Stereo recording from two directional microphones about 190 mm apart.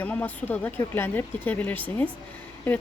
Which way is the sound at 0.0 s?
10° left (ahead or behind).